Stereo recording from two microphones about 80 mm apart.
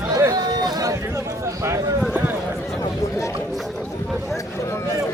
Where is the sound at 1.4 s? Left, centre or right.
Right.